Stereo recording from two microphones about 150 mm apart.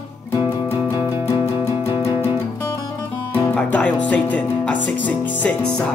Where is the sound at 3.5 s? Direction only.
10° left (ahead or behind).